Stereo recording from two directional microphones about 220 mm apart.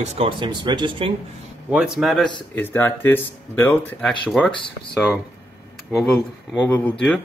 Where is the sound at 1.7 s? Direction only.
5° right (ahead or behind).